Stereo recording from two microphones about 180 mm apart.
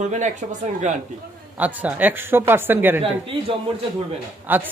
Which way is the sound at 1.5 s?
10° right (ahead or behind).